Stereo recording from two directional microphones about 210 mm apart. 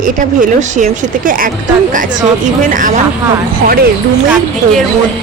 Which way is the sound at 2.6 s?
40° right (ahead or behind).